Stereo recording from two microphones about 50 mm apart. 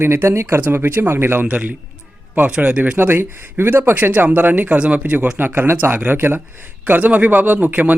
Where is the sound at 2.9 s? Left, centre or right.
Right.